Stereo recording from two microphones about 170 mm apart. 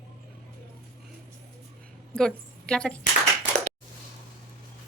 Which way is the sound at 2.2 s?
5° left (ahead or behind).